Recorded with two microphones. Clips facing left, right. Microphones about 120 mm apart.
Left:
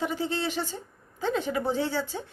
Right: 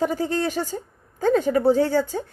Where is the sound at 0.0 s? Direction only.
45° right (ahead or behind).